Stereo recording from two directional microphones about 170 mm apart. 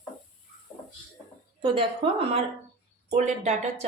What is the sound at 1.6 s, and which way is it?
Speech, 30° right (ahead or behind).